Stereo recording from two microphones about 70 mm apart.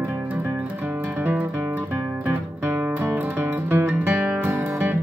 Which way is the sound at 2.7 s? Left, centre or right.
Right.